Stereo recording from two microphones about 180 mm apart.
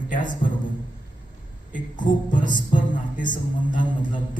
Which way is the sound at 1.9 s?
45° left (ahead or behind).